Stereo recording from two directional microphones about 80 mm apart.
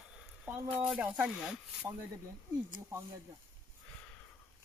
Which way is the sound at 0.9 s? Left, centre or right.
Centre.